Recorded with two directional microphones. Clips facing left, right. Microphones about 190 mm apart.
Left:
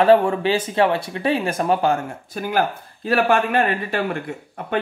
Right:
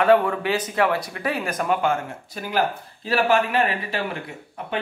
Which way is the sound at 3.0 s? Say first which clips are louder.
Left 2 dB; 55° left (ahead or behind).